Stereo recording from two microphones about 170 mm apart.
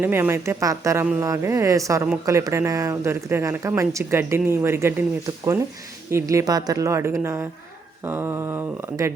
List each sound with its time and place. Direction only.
0.0 s speech: 15° right (ahead or behind)
6.1 s speech: 15° right (ahead or behind)